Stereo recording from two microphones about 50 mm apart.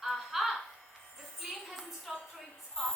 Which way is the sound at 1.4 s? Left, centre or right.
Centre.